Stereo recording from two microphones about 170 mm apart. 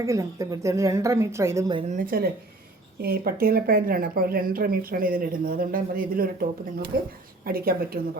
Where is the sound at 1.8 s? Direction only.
45° right (ahead or behind).